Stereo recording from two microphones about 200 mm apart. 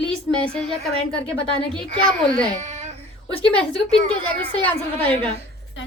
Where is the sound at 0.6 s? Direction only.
5° left (ahead or behind).